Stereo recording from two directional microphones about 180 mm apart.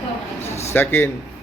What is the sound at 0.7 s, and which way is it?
Speech, 10° left (ahead or behind).